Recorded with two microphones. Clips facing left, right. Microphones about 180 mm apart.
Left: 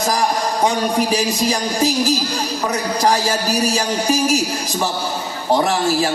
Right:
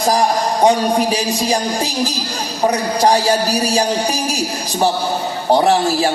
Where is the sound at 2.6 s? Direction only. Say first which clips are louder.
Right 4 dB; 35° right (ahead or behind).